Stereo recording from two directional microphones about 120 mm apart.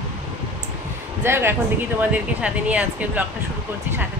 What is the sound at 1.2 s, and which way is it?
Speech, 20° right (ahead or behind).